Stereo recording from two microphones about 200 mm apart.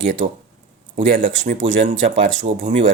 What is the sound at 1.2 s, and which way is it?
Speech, 70° right (ahead or behind).